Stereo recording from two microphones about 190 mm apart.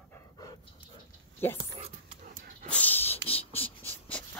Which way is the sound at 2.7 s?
10° left (ahead or behind).